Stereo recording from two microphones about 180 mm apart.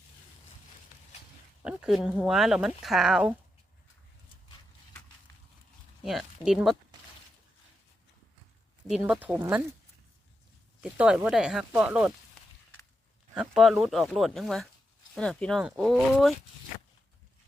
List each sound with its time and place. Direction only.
1.6 s a sound: 5° right (ahead or behind)
2.0 s speech: 5° right (ahead or behind)
6.0 s speech: centre (ahead or behind)
8.9 s speech: 5° right (ahead or behind)
10.8 s speech: 5° right (ahead or behind)
13.3 s speech: 5° right (ahead or behind)